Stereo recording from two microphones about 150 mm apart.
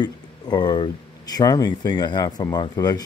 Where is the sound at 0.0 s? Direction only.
30° left (ahead or behind).